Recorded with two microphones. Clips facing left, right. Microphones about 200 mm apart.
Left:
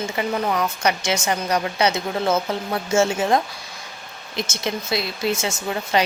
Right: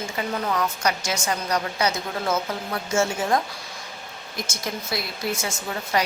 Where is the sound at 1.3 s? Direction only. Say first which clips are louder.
Left 1 dB; 25° left (ahead or behind).